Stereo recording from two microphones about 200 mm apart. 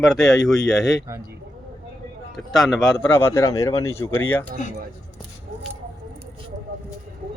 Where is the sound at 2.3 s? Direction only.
Centre (ahead or behind).